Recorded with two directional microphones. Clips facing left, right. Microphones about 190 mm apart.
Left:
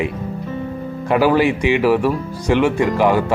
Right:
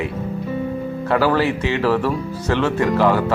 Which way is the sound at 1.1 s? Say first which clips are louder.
Left 3 dB; 15° left (ahead or behind).